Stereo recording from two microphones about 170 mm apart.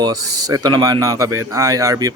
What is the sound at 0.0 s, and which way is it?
Speech, 20° right (ahead or behind).